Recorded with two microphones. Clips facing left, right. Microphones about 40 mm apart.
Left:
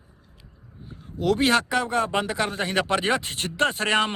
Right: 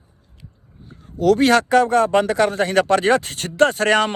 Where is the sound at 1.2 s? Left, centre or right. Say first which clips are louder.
Right 6 dB; left.